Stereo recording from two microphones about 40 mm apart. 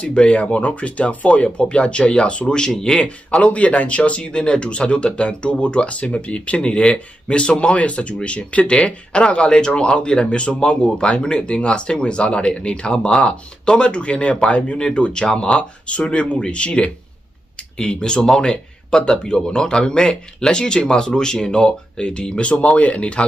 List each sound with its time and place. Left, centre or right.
0.0 s speech: left